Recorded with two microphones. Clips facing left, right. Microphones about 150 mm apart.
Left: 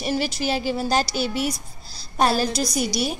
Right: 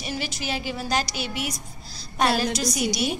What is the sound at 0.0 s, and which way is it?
A woman's voice, 40° left (ahead or behind).